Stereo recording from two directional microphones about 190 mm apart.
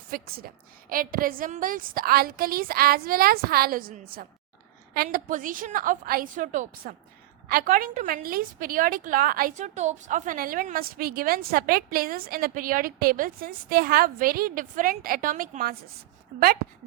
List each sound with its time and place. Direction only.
0.1 s a woman's voice: 50° right (ahead or behind)